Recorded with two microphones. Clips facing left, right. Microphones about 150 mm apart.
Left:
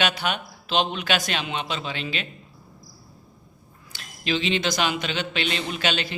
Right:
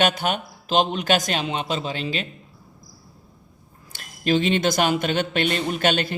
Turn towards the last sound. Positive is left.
turn(degrees=-50)  # may be behind; listen again after turning